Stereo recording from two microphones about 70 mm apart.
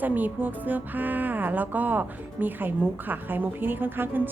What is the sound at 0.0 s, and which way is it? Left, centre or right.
A woman's voice, right.